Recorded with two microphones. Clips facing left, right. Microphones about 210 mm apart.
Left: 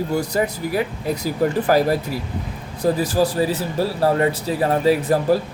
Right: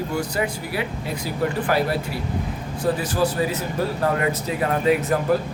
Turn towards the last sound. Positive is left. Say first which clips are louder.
# left 2 dB
turn(degrees=35)  # may be behind; listen again after turning